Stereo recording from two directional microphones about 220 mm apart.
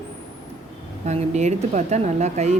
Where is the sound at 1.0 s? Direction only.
30° right (ahead or behind).